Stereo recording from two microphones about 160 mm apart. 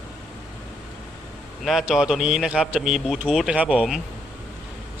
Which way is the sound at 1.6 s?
Centre (ahead or behind).